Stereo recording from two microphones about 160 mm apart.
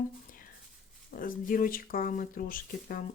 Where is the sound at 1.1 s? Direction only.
60° left (ahead or behind).